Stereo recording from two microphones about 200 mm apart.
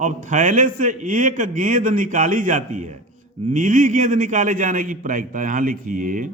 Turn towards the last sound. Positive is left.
turn(degrees=-40)  # may be behind; listen again after turning